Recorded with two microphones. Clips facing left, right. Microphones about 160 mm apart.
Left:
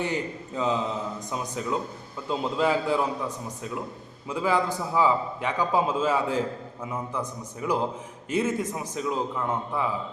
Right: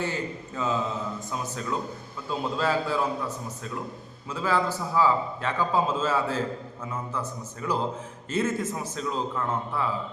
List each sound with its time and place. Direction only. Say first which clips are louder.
0.0 s a man's voice: left 1 dB; 15° left (ahead or behind)
4.3 s a man's voice: left 1 dB; 15° left (ahead or behind)